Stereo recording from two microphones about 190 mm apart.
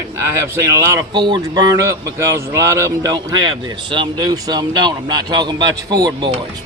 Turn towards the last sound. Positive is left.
turn(degrees=-20)  # may be behind; listen again after turning